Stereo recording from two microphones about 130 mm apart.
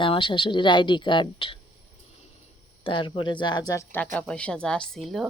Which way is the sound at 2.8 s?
40° left (ahead or behind).